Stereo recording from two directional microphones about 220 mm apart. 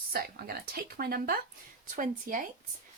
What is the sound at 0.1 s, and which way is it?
A woman's voice, 45° right (ahead or behind).